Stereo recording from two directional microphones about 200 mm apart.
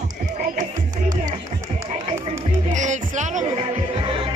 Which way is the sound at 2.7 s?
35° right (ahead or behind).